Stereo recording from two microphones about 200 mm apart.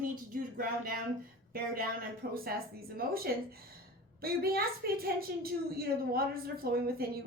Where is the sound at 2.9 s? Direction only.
50° right (ahead or behind).